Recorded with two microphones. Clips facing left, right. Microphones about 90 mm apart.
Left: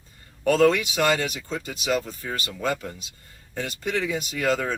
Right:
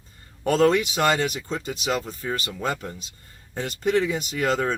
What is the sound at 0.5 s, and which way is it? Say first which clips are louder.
Speech: even; 25° right (ahead or behind).